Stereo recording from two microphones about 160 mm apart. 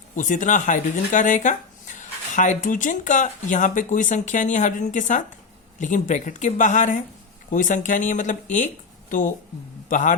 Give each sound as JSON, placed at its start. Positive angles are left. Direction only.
{"t": 0.2, "sound": "speech", "side_deg": 50}